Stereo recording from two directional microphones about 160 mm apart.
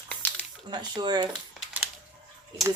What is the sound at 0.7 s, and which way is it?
Speech, 30° right (ahead or behind).